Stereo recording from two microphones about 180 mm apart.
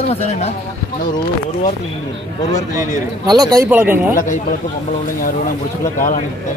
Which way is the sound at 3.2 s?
20° right (ahead or behind).